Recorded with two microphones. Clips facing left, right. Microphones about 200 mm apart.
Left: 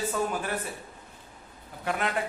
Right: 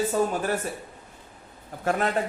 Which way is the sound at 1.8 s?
40° right (ahead or behind).